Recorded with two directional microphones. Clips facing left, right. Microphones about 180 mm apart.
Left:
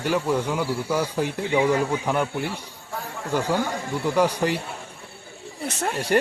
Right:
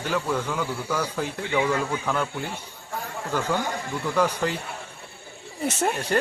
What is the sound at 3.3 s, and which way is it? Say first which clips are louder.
A man's voice: left 3 dB; 10° left (ahead or behind).